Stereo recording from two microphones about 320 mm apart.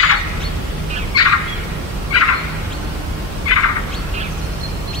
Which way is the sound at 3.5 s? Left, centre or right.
Left.